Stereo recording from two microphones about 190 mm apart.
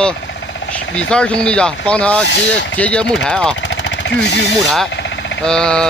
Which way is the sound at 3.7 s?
70° left (ahead or behind).